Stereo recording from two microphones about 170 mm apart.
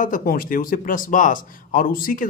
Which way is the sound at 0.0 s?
55° left (ahead or behind).